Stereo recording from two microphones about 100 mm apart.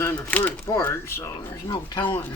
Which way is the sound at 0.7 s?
25° left (ahead or behind).